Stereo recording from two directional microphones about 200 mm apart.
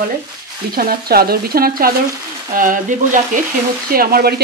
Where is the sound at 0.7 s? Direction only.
50° right (ahead or behind).